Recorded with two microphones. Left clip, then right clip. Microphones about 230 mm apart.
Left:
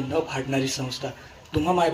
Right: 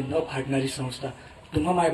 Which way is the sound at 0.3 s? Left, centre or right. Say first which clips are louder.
Left 2 dB; left.